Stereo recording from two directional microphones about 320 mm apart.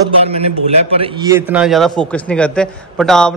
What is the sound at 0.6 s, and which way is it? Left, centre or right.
A man's voice, centre.